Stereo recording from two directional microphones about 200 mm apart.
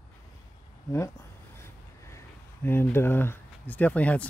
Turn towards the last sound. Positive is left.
turn(degrees=5)  # may be behind; listen again after turning